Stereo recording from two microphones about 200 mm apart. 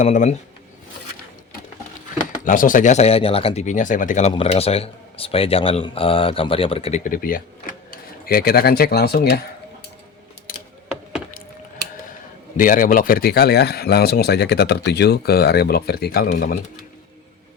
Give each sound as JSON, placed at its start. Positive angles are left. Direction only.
{"t": 0.0, "sound": "speech", "side_deg": 35}
{"t": 2.4, "sound": "speech", "side_deg": 40}
{"t": 7.0, "sound": "speech", "side_deg": 45}
{"t": 10.5, "sound": "a sound", "side_deg": 45}
{"t": 12.5, "sound": "speech", "side_deg": 45}